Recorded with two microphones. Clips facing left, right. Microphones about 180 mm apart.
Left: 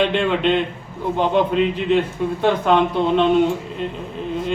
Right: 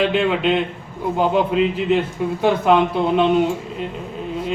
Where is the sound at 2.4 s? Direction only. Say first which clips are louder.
Right 1 dB; 5° right (ahead or behind).